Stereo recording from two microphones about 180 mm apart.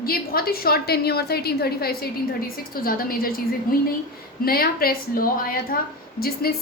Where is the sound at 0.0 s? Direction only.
55° left (ahead or behind).